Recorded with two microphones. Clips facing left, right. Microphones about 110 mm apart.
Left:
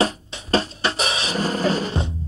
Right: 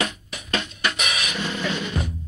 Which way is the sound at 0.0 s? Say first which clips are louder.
Left 6 dB; 35° left (ahead or behind).